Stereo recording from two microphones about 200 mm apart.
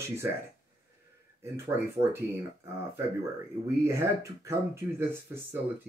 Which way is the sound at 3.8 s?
15° right (ahead or behind).